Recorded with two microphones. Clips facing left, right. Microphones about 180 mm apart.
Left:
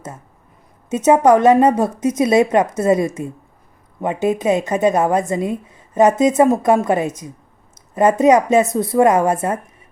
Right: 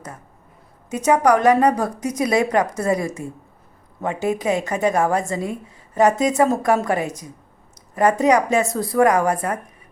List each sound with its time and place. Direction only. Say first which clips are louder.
0.9 s a woman's voice: left 4 dB; 25° left (ahead or behind)